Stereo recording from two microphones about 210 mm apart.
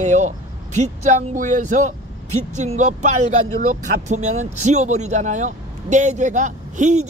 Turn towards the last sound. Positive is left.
turn(degrees=-35)  # may be behind; listen again after turning